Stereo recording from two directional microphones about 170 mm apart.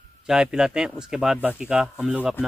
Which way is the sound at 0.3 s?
5° right (ahead or behind).